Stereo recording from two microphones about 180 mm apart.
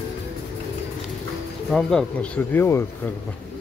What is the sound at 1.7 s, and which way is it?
Speech, 5° left (ahead or behind).